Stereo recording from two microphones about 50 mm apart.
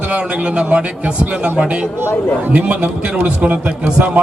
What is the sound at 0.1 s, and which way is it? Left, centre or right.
A man's voice, right.